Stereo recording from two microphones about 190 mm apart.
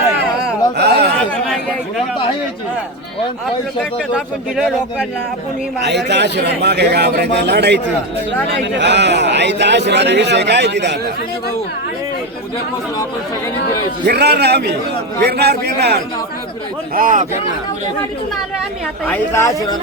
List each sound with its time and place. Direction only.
0.8 s a sound: 60° right (ahead or behind)
6.1 s a man's voice: 65° right (ahead or behind)
14.1 s a man's voice: 60° right (ahead or behind)
16.9 s speech: 45° right (ahead or behind)
19.0 s a woman's voice: 10° left (ahead or behind)